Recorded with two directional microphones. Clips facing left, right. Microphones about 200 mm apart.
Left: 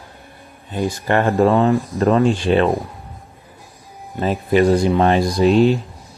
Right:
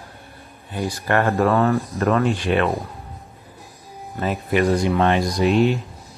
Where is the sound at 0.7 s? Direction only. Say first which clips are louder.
Left 3 dB; 20° left (ahead or behind).